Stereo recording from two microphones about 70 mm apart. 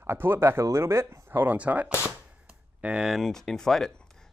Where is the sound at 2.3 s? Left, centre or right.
Centre.